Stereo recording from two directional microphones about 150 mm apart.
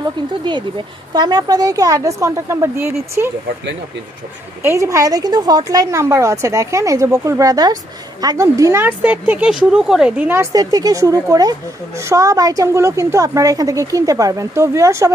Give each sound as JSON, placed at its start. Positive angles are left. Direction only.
{"t": 1.1, "sound": "a woman's voice", "side_deg": -30}
{"t": 4.6, "sound": "a woman's voice", "side_deg": -20}